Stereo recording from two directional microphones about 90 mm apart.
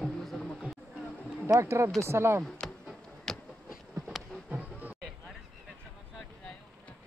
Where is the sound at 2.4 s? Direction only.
5° left (ahead or behind).